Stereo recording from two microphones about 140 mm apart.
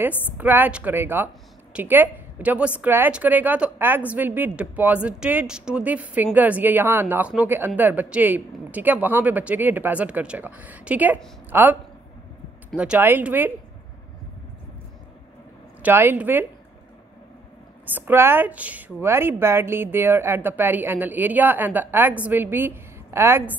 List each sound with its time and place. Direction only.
0.4 s a woman's voice: 15° right (ahead or behind)
15.8 s a woman's voice: 15° right (ahead or behind)
17.9 s a woman's voice: 15° right (ahead or behind)